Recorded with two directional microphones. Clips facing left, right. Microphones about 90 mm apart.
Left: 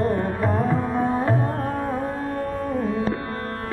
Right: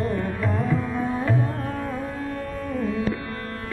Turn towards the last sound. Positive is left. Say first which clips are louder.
# left 2 dB
turn(degrees=35)  # may be behind; listen again after turning